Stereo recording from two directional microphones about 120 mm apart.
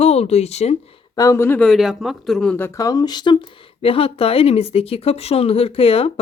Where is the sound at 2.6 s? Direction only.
30° left (ahead or behind).